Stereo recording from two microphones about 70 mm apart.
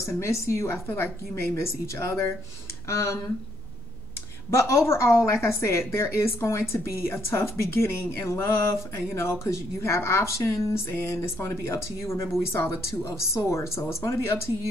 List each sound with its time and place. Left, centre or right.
0.0 s a woman's voice: left
0.7 s a woman's voice: left
4.5 s a woman's voice: left
10.7 s a woman's voice: left